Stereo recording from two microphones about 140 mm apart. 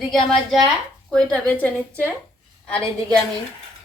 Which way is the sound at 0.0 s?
Centre (ahead or behind).